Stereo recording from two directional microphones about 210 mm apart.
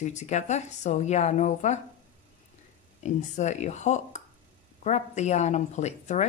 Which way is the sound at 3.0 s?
35° left (ahead or behind).